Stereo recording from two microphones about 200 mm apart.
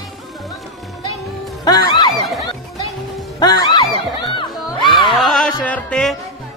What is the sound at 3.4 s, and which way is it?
Music, 20° left (ahead or behind).